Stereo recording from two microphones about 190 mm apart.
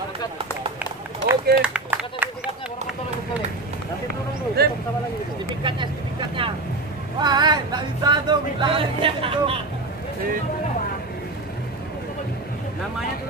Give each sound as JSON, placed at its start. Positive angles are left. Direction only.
{"t": 1.3, "sound": "run", "side_deg": -10}
{"t": 4.6, "sound": "a sound", "side_deg": -55}
{"t": 5.6, "sound": "vehicle", "side_deg": -25}
{"t": 7.2, "sound": "music", "side_deg": -20}